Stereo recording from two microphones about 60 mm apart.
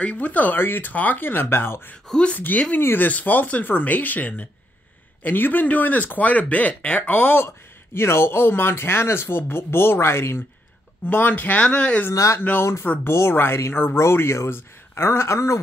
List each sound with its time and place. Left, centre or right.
0.0 s speech: left
2.8 s speech: left
3.1 s speech: left
11.1 s speech: left
11.6 s speech: centre
12.1 s speech: left
12.8 s speech: left
13.1 s speech: left